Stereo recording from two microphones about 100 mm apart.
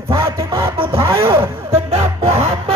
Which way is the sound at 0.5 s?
60° right (ahead or behind).